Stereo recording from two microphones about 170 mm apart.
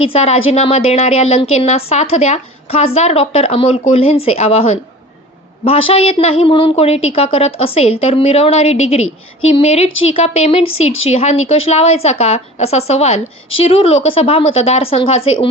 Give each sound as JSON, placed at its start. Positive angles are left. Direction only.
{"t": 0.1, "sound": "a woman's voice", "side_deg": 35}